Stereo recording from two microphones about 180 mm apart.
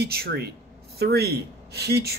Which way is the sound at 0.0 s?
60° right (ahead or behind).